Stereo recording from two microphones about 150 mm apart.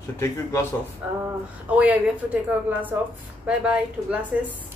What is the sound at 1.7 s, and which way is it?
Speech, 10° right (ahead or behind).